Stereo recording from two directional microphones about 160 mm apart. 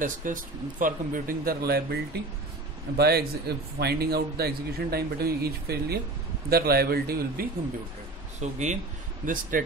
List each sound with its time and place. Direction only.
0.0 s speech: 55° right (ahead or behind); by 2.0 s 75° right (ahead or behind)
3.0 s a man's voice: 80° right
8.4 s speech: 45° right (ahead or behind)
9.2 s speech: 55° right (ahead or behind)